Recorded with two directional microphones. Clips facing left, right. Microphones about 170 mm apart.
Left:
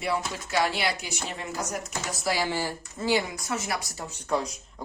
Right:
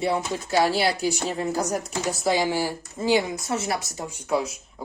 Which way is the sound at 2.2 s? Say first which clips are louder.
Right 4 dB; 20° right (ahead or behind).